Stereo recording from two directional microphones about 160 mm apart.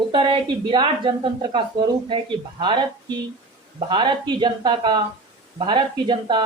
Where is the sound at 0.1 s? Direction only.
30° right (ahead or behind).